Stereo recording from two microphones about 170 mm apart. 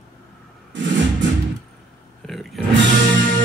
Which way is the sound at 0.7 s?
90° right.